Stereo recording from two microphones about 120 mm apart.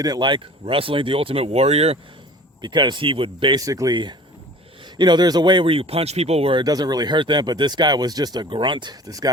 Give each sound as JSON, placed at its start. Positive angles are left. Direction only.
{"t": 0.0, "sound": "speech", "side_deg": -35}
{"t": 2.6, "sound": "speech", "side_deg": -40}
{"t": 3.6, "sound": "speech", "side_deg": -30}